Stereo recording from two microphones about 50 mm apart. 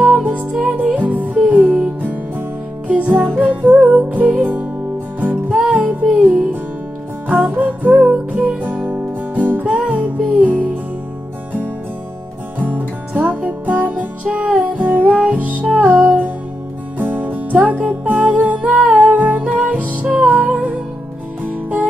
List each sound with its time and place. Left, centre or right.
0.0 s music: right
0.5 s music: centre
0.9 s music: right
3.4 s music: right
12.5 s music: right